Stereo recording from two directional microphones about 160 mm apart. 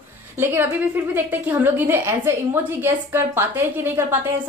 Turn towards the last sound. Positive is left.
turn(degrees=-15)  # may be behind; listen again after turning